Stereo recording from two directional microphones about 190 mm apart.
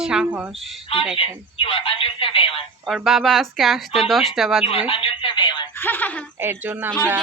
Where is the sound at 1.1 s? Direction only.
30° left (ahead or behind).